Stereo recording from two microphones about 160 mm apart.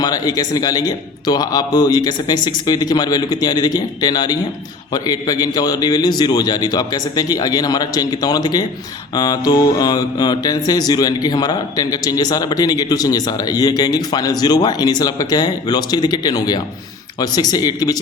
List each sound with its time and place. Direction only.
0.0 s mantra: 25° left (ahead or behind)